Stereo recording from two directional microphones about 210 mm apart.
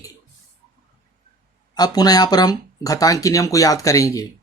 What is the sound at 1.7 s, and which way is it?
Speech, 20° left (ahead or behind).